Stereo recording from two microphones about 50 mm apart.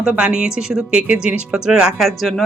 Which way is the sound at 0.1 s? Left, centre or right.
Right.